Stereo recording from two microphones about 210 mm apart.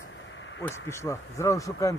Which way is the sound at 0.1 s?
60° left (ahead or behind).